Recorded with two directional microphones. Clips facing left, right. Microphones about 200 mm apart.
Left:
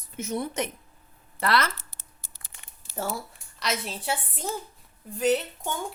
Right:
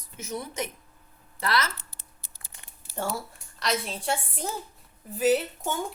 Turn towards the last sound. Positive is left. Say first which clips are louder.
# right 1 dB
turn(degrees=-5)  # may be behind; listen again after turning